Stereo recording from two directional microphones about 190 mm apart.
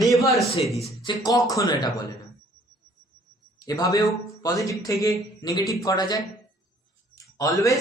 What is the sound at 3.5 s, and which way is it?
A man's voice, 20° left (ahead or behind).